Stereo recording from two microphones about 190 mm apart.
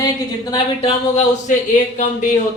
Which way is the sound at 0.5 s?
35° left (ahead or behind).